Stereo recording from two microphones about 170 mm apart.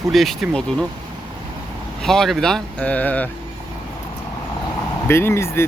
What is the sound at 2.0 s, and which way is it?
Speech, 5° left (ahead or behind).